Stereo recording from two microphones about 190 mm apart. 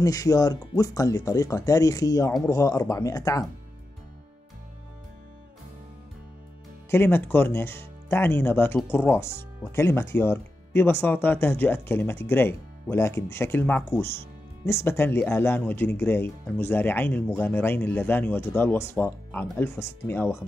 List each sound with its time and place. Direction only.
0.0 s speech: 20° left (ahead or behind)
6.9 s speech: 10° left (ahead or behind)